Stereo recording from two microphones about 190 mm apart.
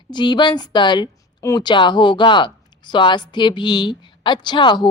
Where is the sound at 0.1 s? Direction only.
25° left (ahead or behind).